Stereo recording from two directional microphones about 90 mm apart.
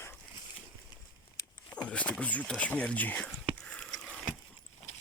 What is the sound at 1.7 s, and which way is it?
Speech, 10° left (ahead or behind).